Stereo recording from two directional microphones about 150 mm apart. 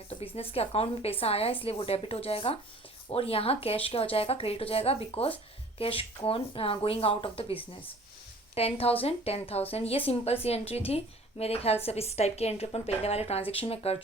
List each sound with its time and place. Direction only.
0.1 s a woman's voice: 40° left (ahead or behind)